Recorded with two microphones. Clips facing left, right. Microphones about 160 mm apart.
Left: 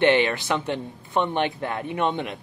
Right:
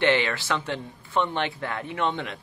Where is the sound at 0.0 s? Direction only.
20° left (ahead or behind).